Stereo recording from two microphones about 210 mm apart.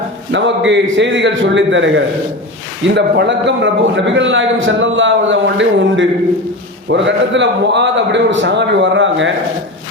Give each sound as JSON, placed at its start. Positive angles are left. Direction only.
{"t": 0.3, "sound": "a man's voice", "side_deg": -60}